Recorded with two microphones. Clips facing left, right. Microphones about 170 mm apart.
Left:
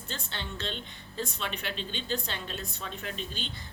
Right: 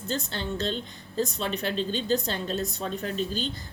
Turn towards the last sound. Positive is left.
turn(degrees=-40)  # may be behind; listen again after turning